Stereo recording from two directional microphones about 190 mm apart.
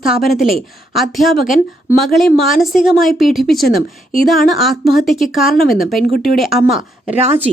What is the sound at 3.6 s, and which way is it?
Speech, 45° left (ahead or behind).